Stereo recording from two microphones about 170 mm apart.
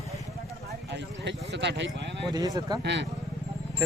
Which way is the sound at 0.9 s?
90° right.